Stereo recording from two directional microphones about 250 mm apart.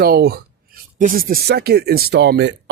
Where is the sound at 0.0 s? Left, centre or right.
Right.